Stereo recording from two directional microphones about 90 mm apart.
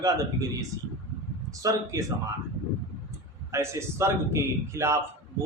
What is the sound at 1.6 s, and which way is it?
Speech, 40° right (ahead or behind).